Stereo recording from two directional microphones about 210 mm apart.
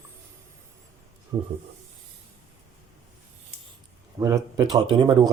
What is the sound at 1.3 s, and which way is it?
Speech, 15° right (ahead or behind).